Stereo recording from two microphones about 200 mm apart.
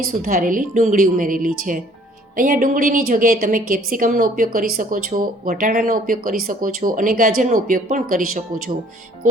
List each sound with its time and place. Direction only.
0.2 s a woman's voice: 40° right (ahead or behind)